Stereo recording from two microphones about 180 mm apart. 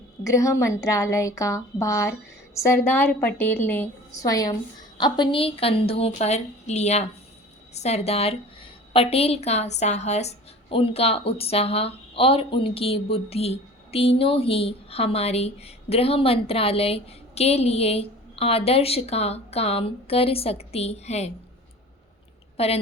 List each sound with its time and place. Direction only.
0.3 s a woman's voice: 15° left (ahead or behind); by 21.3 s 35° left (ahead or behind)
22.5 s a woman's voice: 35° left (ahead or behind)